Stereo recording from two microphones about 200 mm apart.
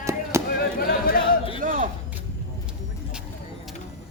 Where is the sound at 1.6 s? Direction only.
45° right (ahead or behind).